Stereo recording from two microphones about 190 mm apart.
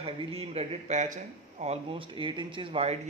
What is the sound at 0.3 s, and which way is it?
A man's voice, 30° right (ahead or behind).